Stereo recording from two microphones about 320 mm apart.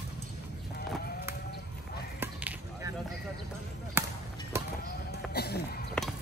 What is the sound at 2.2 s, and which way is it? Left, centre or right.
Chop, centre.